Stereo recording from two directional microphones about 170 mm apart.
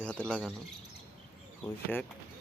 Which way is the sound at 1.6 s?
10° left (ahead or behind).